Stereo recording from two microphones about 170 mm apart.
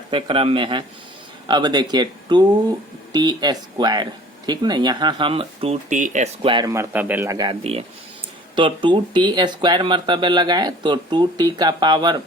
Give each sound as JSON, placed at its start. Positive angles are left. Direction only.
{"t": 0.1, "sound": "speech", "side_deg": -30}
{"t": 6.7, "sound": "speech", "side_deg": -15}
{"t": 7.6, "sound": "speech", "side_deg": -35}